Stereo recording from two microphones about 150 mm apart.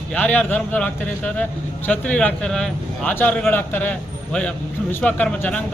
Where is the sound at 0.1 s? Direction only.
10° left (ahead or behind).